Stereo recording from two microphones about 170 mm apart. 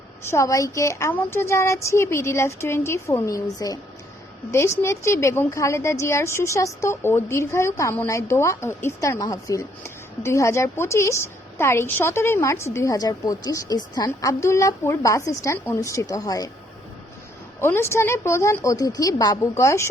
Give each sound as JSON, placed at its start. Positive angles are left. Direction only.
{"t": 0.2, "sound": "a woman's voice", "side_deg": 15}
{"t": 17.6, "sound": "a woman's voice", "side_deg": 15}